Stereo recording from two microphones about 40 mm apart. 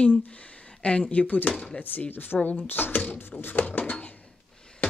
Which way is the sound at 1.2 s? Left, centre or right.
Left.